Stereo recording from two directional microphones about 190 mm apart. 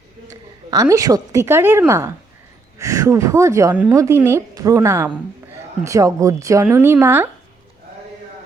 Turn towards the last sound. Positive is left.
turn(degrees=-10)  # may be behind; listen again after turning